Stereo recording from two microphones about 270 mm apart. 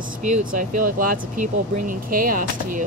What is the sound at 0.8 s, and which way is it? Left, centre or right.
Speech, right.